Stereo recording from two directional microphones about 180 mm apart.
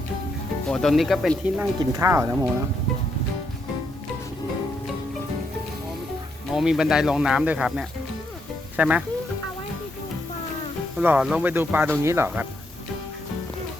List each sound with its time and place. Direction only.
0.7 s speech: centre (ahead or behind)
2.0 s speech: 15° right (ahead or behind)
6.5 s speech: centre (ahead or behind)
10.9 s speech: 5° right (ahead or behind)